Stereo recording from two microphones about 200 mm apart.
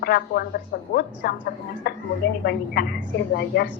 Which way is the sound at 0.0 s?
50° left (ahead or behind).